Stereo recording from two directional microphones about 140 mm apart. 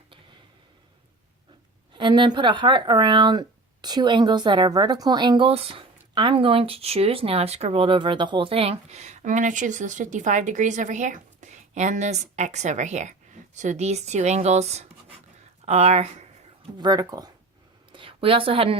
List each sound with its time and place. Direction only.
1.9 s speech: 35° right (ahead or behind); by 16.0 s 50° right (ahead or behind)
16.7 s speech: 30° right (ahead or behind)
17.9 s a woman's voice: 40° right (ahead or behind)